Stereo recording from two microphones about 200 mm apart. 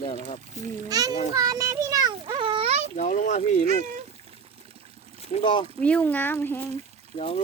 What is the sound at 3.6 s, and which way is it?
Speech, 35° right (ahead or behind).